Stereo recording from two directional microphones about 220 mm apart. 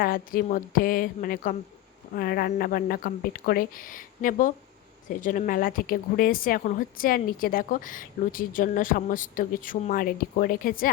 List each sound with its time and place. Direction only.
0.0 s speech: 40° left (ahead or behind)